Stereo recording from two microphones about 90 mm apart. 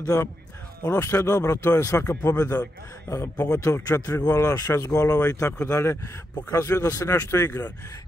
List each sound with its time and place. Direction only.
0.0 s speech: 40° left (ahead or behind)